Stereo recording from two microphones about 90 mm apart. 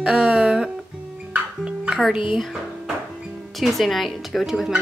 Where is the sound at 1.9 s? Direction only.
Centre (ahead or behind).